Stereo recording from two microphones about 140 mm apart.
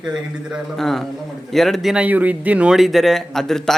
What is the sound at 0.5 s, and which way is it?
A man's voice, centre (ahead or behind).